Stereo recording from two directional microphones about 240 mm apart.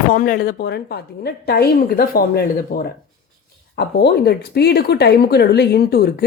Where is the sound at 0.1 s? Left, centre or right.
Left.